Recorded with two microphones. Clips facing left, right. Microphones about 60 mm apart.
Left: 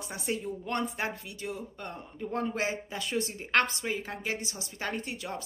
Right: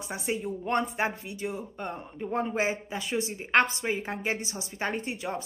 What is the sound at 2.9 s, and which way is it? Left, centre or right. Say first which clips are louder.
A woman's voice: right 2 dB; centre.